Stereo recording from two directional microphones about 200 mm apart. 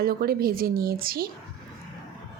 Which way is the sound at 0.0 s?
50° right (ahead or behind).